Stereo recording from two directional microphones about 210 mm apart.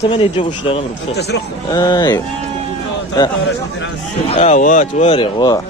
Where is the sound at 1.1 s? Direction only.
50° left (ahead or behind).